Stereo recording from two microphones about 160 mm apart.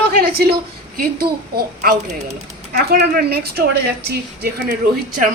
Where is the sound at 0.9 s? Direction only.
65° right (ahead or behind).